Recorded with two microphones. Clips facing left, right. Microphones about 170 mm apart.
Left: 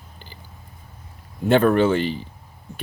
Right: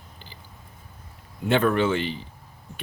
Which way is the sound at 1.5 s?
40° left (ahead or behind).